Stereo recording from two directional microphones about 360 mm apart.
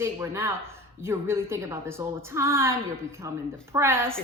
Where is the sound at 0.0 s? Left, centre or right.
Centre.